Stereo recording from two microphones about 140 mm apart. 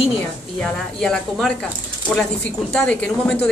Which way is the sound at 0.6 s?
5° left (ahead or behind).